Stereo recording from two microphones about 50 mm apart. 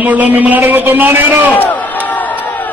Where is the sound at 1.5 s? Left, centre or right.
Left.